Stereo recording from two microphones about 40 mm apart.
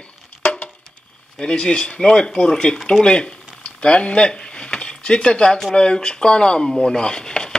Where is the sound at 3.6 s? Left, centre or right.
Left.